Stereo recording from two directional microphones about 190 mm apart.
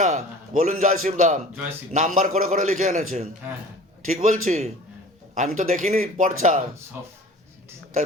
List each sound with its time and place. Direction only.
0.0 s a man's voice: 40° right (ahead or behind)